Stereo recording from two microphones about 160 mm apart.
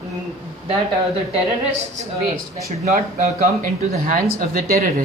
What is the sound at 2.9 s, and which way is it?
Speech, 45° right (ahead or behind).